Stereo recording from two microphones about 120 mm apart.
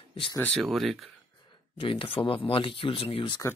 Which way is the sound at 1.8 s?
45° left (ahead or behind).